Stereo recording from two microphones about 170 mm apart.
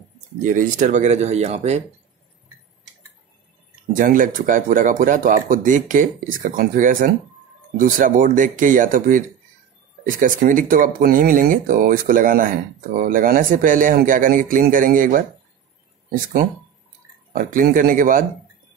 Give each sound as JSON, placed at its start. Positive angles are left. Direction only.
{"t": 0.6, "sound": "speech", "side_deg": -45}
{"t": 3.9, "sound": "speech", "side_deg": -50}